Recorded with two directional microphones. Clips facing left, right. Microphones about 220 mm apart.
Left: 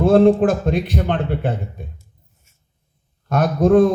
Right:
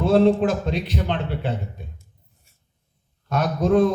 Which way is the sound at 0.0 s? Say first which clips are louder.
Left 4 dB; 50° left (ahead or behind).